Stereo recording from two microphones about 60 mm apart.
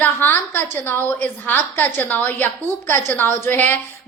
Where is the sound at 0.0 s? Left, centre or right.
Left.